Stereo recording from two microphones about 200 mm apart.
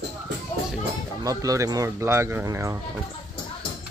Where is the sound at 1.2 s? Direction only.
15° right (ahead or behind).